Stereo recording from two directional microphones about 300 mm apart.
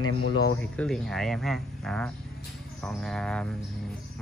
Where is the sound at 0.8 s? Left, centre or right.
Centre.